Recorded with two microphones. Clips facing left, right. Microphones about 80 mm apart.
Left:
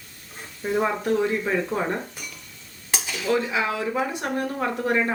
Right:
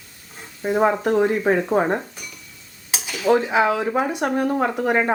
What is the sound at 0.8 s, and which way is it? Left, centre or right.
Speech, right.